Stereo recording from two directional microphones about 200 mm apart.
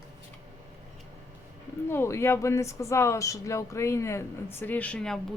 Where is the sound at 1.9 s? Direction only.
10° left (ahead or behind).